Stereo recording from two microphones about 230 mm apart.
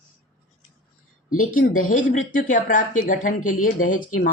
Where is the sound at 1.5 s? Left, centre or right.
Left.